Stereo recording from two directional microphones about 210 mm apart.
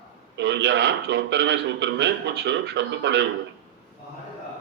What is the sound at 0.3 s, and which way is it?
A man's voice, 55° right (ahead or behind).